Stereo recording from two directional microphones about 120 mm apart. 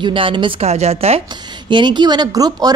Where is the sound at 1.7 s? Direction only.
40° right (ahead or behind).